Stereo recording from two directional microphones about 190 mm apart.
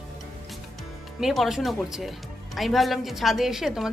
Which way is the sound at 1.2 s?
Centre (ahead or behind).